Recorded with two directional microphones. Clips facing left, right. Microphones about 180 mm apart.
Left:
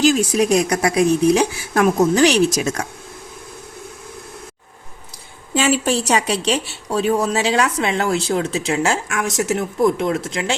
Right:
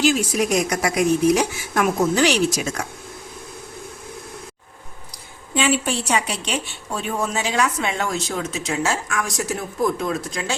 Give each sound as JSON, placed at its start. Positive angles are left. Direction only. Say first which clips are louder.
{"t": 0.0, "sound": "a woman's voice", "louder": "left 4 dB", "side_deg": 35}
{"t": 5.5, "sound": "a woman's voice", "louder": "left 3 dB", "side_deg": 40}